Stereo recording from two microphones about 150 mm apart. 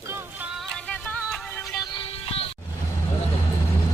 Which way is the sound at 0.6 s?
5° left (ahead or behind).